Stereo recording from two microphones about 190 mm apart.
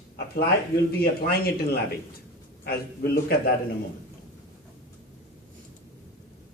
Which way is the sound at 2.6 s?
55° left (ahead or behind).